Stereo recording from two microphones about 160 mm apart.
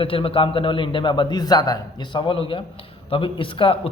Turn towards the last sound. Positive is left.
turn(degrees=35)  # may be behind; listen again after turning